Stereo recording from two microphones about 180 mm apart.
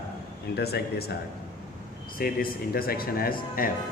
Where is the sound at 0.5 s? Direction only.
60° left (ahead or behind).